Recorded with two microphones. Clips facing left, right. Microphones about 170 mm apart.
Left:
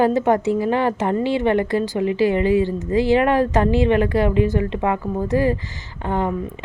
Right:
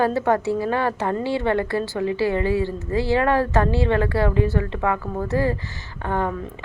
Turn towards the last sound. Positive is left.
turn(degrees=15)  # may be behind; listen again after turning